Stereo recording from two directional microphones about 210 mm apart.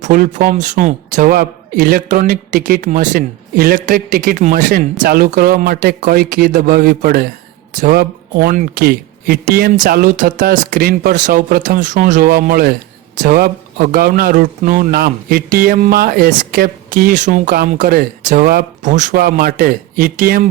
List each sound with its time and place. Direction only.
0.0 s speech: 40° right (ahead or behind)